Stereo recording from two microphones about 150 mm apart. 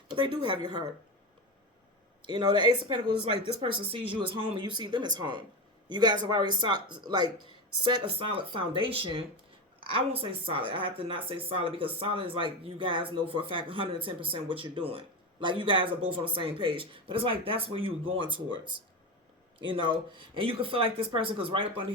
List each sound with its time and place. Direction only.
0.1 s a woman's voice: 35° right (ahead or behind)
2.2 s speech: 30° right (ahead or behind)